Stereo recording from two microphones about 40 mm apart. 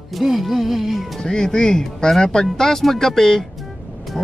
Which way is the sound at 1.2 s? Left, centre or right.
Centre.